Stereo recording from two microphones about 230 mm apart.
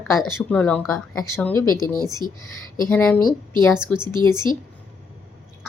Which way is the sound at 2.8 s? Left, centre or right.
Centre.